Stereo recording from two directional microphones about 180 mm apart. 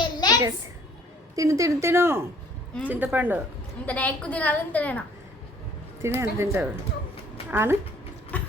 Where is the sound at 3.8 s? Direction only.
10° left (ahead or behind).